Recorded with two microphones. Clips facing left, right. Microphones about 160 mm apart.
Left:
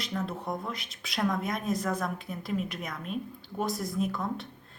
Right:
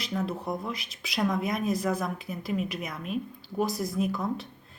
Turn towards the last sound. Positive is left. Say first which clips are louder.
# right 2 dB
turn(degrees=0)  # may be behind; listen again after turning